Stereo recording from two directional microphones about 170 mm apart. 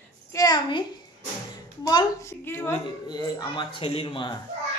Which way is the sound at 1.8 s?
20° left (ahead or behind).